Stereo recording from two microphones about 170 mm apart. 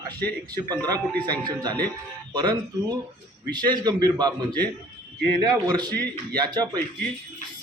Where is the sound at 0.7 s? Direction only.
20° right (ahead or behind).